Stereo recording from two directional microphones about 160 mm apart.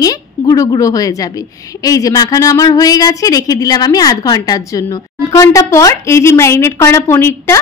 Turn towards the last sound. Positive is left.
turn(degrees=15)  # may be behind; listen again after turning